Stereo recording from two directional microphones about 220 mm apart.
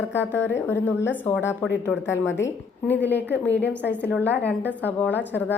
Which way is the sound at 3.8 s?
50° left (ahead or behind).